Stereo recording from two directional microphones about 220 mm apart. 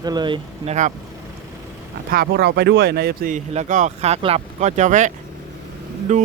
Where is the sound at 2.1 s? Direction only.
45° right (ahead or behind).